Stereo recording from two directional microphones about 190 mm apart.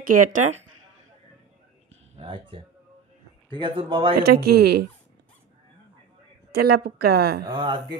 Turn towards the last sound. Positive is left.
turn(degrees=-25)  # may be behind; listen again after turning